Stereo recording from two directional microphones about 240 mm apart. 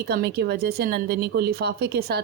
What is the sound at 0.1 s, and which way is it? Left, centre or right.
Speech, right.